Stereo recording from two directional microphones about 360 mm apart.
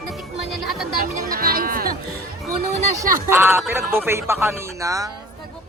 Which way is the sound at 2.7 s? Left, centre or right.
Centre.